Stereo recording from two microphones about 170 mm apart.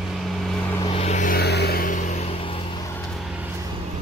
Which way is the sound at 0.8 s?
40° left (ahead or behind).